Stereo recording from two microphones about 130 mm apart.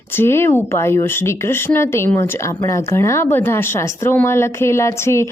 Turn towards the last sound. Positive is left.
turn(degrees=20)  # may be behind; listen again after turning